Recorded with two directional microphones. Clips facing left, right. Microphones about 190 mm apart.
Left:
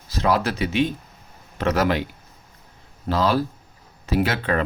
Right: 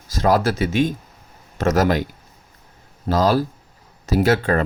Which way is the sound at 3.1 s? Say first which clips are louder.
Right 3 dB; 40° right (ahead or behind).